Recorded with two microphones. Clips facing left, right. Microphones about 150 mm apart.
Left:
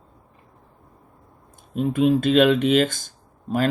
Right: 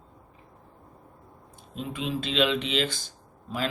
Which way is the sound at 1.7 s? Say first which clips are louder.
Left 13 dB; 50° left (ahead or behind).